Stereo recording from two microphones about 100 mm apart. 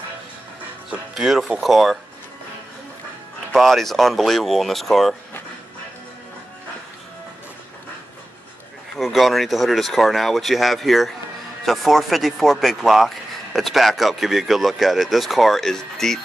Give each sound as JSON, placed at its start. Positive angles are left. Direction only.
{"t": 0.8, "sound": "speech", "side_deg": -5}
{"t": 3.5, "sound": "speech", "side_deg": 0}
{"t": 8.9, "sound": "speech", "side_deg": 0}